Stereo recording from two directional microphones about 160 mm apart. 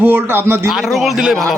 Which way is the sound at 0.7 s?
Centre (ahead or behind).